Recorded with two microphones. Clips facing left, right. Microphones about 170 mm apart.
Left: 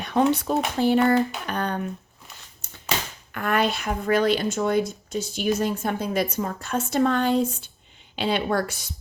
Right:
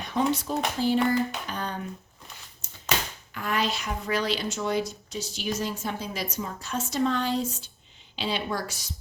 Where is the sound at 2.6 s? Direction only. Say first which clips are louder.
Left 3 dB; 60° left (ahead or behind).